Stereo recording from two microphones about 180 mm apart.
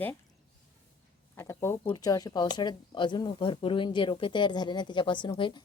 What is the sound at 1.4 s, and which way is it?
A woman's voice, 15° left (ahead or behind).